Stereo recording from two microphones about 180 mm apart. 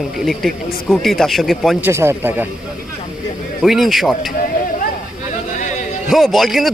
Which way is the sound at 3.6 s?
Centre (ahead or behind).